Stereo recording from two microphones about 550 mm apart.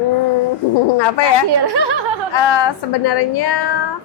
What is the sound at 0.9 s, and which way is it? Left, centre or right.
Speech, left.